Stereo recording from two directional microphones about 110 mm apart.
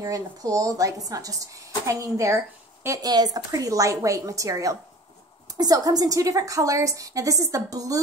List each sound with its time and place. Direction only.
0.0 s speech: 35° right (ahead or behind)